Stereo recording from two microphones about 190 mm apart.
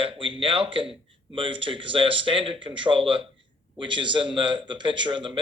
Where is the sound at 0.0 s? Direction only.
25° right (ahead or behind).